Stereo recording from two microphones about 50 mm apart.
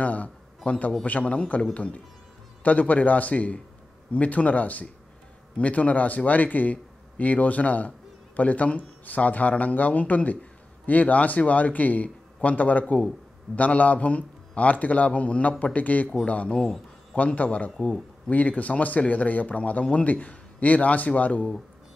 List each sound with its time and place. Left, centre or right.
0.0 s a sound: left
0.7 s speech: left
16.5 s speech: centre
17.1 s speech: left